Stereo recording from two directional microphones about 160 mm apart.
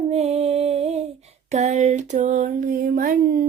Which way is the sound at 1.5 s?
50° right (ahead or behind).